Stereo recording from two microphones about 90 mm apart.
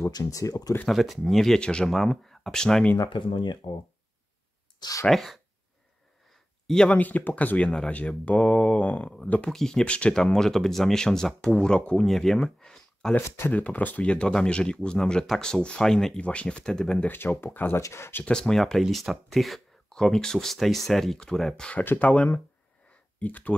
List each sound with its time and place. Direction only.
0.0 s speech: 40° left (ahead or behind)
0.8 s speech: centre (ahead or behind)
3.1 s speech: 65° left (ahead or behind)
4.7 s speech: 45° left (ahead or behind)
5.0 s speech: centre (ahead or behind)
6.7 s speech: 5° left (ahead or behind)
7.0 s speech: 20° left (ahead or behind)
13.1 s speech: 20° left (ahead or behind)
17.1 s speech: 25° left (ahead or behind)
18.2 s speech: 5° left (ahead or behind)